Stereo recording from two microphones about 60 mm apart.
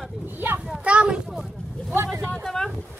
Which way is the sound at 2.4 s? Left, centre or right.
Centre.